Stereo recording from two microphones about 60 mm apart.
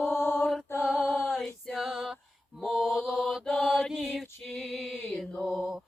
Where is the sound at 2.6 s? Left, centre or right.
Centre.